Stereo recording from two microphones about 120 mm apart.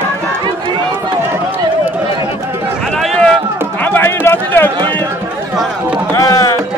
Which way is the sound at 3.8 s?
15° left (ahead or behind).